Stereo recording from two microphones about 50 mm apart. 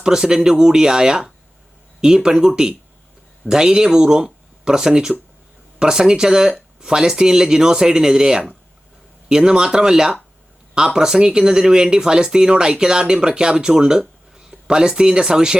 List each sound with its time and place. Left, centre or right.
0.0 s speech: centre